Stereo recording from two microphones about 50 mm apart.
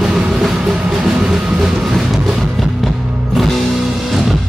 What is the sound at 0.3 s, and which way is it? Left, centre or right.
Train, centre.